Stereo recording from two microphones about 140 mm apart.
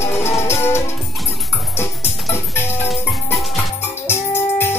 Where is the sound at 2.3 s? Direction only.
15° left (ahead or behind).